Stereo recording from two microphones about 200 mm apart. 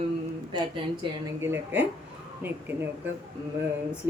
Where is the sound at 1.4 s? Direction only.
10° right (ahead or behind).